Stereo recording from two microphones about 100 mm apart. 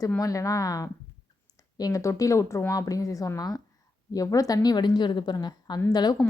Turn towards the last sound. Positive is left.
turn(degrees=45)  # may be behind; listen again after turning